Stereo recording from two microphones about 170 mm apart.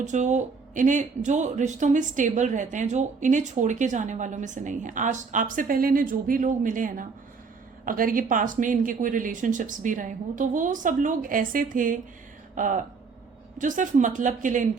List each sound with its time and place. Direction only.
0.0 s speech: 45° right (ahead or behind)